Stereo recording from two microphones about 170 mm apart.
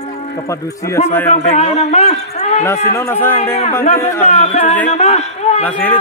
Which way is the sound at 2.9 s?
15° left (ahead or behind).